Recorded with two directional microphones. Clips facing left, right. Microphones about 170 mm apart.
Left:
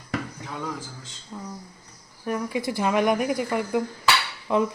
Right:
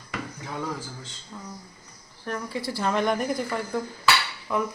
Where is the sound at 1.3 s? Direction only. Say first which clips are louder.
Left 4 dB; 10° left (ahead or behind).